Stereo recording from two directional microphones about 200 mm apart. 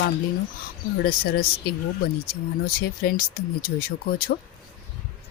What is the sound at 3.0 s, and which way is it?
Speech, 50° left (ahead or behind).